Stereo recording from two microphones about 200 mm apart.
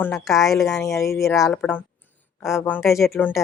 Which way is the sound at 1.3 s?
Centre (ahead or behind).